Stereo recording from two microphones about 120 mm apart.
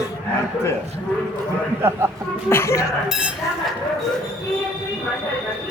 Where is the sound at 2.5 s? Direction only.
20° left (ahead or behind).